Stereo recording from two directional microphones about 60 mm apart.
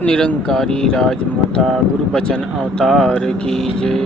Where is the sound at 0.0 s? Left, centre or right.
Centre.